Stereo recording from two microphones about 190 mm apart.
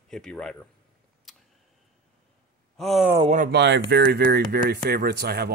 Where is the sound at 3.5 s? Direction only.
60° right (ahead or behind).